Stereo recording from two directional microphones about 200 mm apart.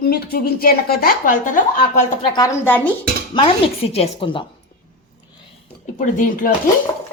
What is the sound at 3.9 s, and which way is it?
Speech, 30° left (ahead or behind).